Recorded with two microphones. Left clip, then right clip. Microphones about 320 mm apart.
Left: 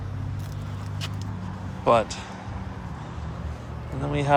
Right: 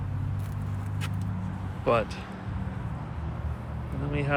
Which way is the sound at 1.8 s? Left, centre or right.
Centre.